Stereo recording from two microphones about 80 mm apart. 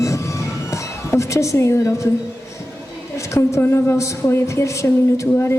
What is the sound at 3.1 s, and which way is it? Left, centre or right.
Speech, left.